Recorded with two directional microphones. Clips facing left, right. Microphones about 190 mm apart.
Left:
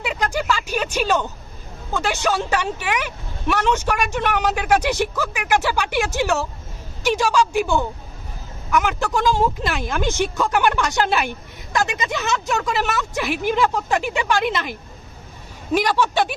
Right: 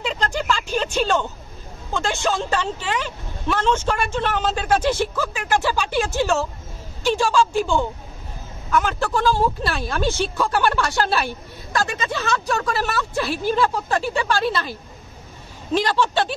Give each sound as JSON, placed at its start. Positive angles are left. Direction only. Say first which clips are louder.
{"t": 0.0, "sound": "vehicle", "louder": "left 1 dB", "side_deg": 10}
{"t": 2.5, "sound": "speech", "louder": "left 1 dB", "side_deg": 15}